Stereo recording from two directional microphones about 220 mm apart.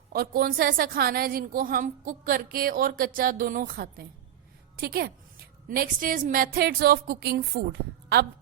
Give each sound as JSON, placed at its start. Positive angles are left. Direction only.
{"t": 0.1, "sound": "a woman's voice", "side_deg": -45}